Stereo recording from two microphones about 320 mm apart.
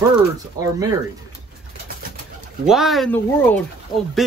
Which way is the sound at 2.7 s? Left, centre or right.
Centre.